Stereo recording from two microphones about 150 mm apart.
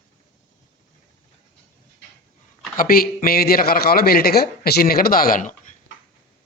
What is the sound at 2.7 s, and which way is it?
Speech, 80° left.